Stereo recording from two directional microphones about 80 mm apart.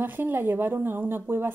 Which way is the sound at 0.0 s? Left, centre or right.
Right.